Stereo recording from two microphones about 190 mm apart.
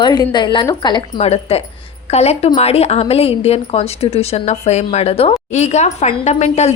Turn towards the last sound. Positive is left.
turn(degrees=35)  # may be behind; listen again after turning